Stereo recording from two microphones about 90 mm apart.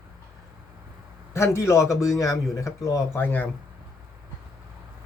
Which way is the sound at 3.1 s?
20° left (ahead or behind).